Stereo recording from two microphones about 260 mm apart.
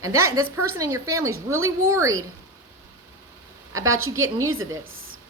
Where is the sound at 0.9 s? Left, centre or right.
Centre.